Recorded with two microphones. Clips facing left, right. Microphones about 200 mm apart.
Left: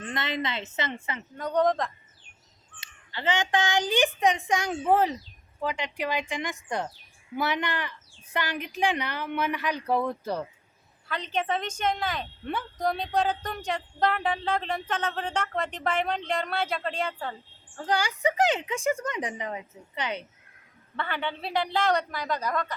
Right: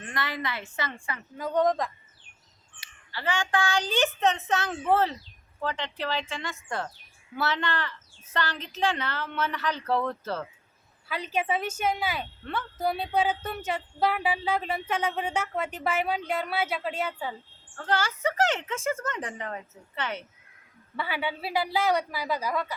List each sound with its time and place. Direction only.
0.0 s a woman's voice: 20° left (ahead or behind)
1.4 s speech: centre (ahead or behind)
2.8 s a woman's voice: 20° left (ahead or behind)
11.1 s speech: 10° right (ahead or behind)
17.7 s a woman's voice: 15° left (ahead or behind)
20.9 s speech: 10° right (ahead or behind)